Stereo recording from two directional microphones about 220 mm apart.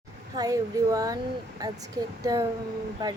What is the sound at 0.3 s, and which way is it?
Speech, 15° right (ahead or behind).